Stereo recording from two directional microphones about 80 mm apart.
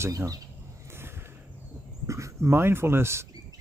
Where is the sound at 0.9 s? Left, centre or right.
Right.